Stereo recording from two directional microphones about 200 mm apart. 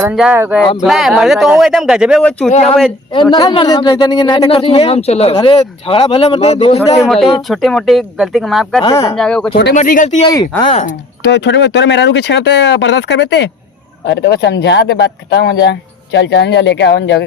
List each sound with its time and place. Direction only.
0.0 s speech: 5° right (ahead or behind)
2.5 s speech: 35° left (ahead or behind)
3.3 s speech: 20° left (ahead or behind)
7.0 s speech: centre (ahead or behind)
8.8 s speech: 20° left (ahead or behind)
9.1 s speech: 5° left (ahead or behind)
9.7 s speech: 40° left (ahead or behind)
11.2 s speech: 60° left (ahead or behind)